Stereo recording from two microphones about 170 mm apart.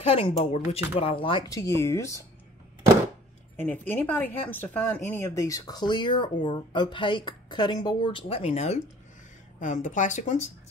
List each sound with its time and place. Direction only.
0.0 s speech: 35° left (ahead or behind)
1.6 s speech: 15° left (ahead or behind)
3.5 s speech: 10° left (ahead or behind); by 10.5 s 45° left (ahead or behind)